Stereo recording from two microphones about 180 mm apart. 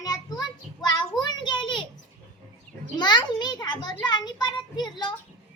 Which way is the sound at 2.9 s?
25° left (ahead or behind).